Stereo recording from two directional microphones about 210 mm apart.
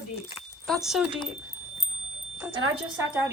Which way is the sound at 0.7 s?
Centre (ahead or behind).